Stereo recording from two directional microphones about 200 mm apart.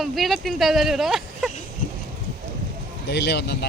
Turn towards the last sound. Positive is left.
turn(degrees=55)  # may be behind; listen again after turning